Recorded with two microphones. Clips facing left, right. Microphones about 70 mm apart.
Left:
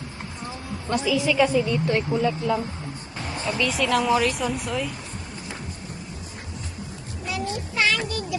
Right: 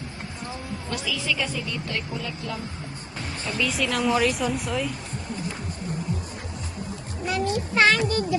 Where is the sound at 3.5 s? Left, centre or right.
Centre.